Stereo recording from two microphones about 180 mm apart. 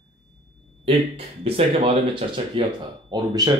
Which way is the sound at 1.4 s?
35° right (ahead or behind).